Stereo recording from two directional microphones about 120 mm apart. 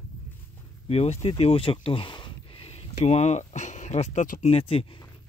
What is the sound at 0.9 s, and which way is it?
Speech, 60° left (ahead or behind).